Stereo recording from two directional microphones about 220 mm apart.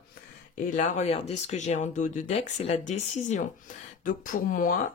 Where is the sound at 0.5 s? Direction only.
35° left (ahead or behind).